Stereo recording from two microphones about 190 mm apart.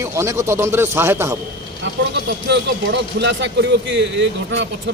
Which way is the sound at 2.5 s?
65° right (ahead or behind).